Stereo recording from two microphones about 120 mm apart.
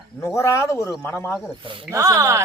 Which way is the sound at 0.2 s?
25° left (ahead or behind).